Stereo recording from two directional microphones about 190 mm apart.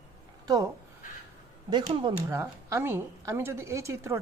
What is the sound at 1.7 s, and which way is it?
Speech, 25° right (ahead or behind).